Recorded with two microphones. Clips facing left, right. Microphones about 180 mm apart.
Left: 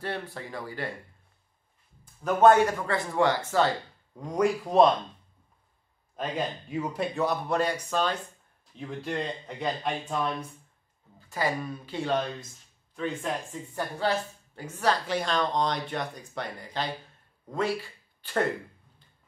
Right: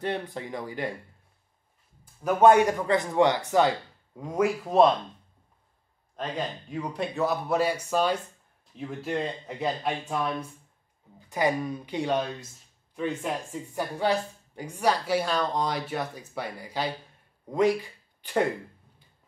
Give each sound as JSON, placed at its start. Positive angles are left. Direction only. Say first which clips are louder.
{"t": 0.0, "sound": "a man's voice", "louder": "right 4 dB", "side_deg": -20}
{"t": 2.2, "sound": "a man's voice", "louder": "right 1 dB", "side_deg": -15}
{"t": 4.2, "sound": "speech", "louder": "even", "side_deg": -5}
{"t": 6.1, "sound": "speech", "louder": "left 1 dB", "side_deg": 5}
{"t": 11.1, "sound": "speech", "louder": "right 4 dB", "side_deg": -20}